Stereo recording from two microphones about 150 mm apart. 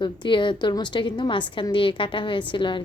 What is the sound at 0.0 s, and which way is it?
A woman's voice, 35° left (ahead or behind).